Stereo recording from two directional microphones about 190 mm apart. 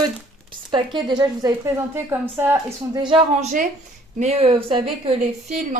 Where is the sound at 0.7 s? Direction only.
25° right (ahead or behind).